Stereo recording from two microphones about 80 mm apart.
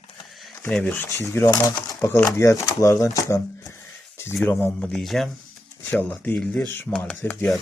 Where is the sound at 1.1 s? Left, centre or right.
Left.